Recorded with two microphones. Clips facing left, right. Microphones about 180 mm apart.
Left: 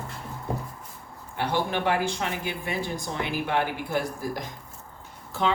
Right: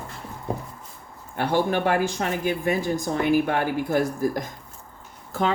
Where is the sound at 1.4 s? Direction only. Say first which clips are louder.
Right 4 dB; 45° right (ahead or behind).